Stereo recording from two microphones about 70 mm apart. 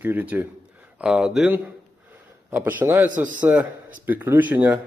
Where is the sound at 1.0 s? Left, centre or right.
Centre.